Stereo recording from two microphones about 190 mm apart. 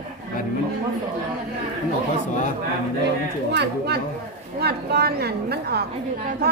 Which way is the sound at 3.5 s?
60° right (ahead or behind).